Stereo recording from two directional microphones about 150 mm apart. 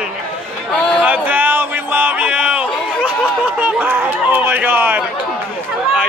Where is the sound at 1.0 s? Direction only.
10° right (ahead or behind).